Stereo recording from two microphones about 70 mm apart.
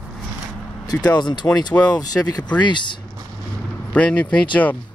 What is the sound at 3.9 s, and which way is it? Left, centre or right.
Speech, centre.